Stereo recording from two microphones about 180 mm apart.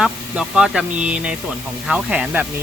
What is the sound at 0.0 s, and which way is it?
Speech, 5° right (ahead or behind).